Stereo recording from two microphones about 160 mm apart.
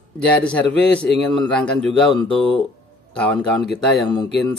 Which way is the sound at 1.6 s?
5° left (ahead or behind).